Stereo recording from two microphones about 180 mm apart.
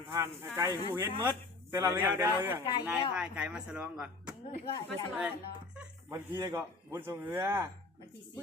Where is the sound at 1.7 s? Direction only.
15° right (ahead or behind).